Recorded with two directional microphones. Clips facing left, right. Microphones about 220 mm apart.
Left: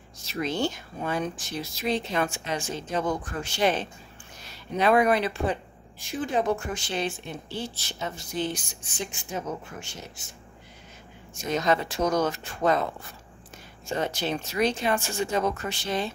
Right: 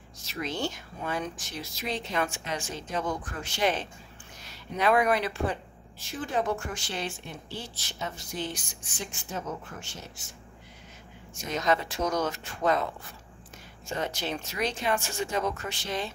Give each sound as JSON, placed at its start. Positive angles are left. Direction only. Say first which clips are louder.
{"t": 0.2, "sound": "speech", "louder": "left 5 dB", "side_deg": 30}
{"t": 4.7, "sound": "speech", "louder": "left 3 dB", "side_deg": 25}
{"t": 9.1, "sound": "speech", "louder": "left 1 dB", "side_deg": 15}
{"t": 11.5, "sound": "speech", "louder": "left 3 dB", "side_deg": 30}
{"t": 13.8, "sound": "speech", "louder": "left 4 dB", "side_deg": 30}